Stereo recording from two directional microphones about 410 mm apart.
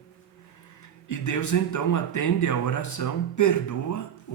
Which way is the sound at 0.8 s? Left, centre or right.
Left.